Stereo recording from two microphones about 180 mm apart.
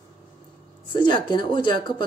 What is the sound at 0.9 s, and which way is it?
Speech, 25° left (ahead or behind).